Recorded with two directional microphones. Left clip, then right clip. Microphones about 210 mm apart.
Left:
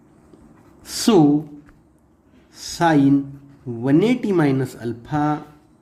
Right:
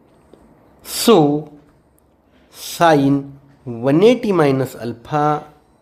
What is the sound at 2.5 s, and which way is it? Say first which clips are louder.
Speech: right 5 dB; 15° right (ahead or behind).